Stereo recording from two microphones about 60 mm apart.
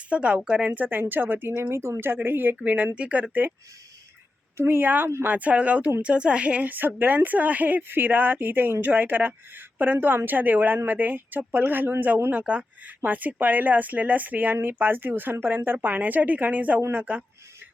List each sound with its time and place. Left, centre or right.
0.1 s speech: right
0.7 s a woman's voice: right
1.7 s a woman's voice: right
4.5 s a woman's voice: right